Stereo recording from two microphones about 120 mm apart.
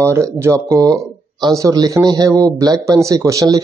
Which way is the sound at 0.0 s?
25° right (ahead or behind).